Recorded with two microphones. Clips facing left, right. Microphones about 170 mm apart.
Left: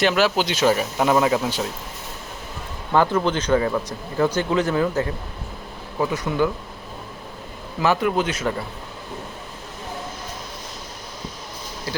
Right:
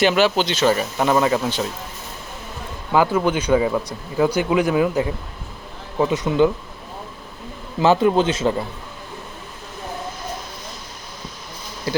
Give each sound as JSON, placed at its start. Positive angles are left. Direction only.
{"t": 0.0, "sound": "speech", "side_deg": 0}
{"t": 2.9, "sound": "a man's voice", "side_deg": -5}
{"t": 7.8, "sound": "a man's voice", "side_deg": -25}